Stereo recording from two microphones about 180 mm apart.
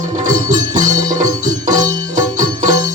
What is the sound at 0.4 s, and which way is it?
Music, 45° right (ahead or behind).